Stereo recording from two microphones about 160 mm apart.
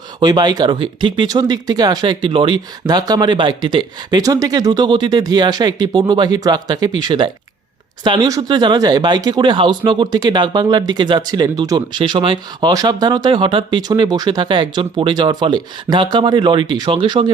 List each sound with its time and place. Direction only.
0.2 s speech: 25° right (ahead or behind)